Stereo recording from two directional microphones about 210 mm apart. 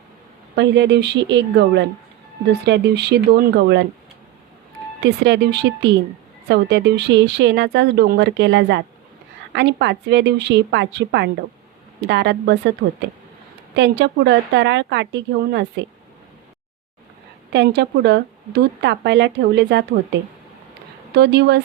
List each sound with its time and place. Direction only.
0.5 s a woman's voice: 55° right (ahead or behind)
5.0 s a woman's voice: 55° right (ahead or behind)
17.5 s a woman's voice: 55° right (ahead or behind)
21.1 s a woman's voice: 55° right (ahead or behind)